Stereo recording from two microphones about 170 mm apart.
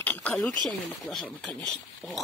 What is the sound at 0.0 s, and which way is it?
Speech, 10° left (ahead or behind).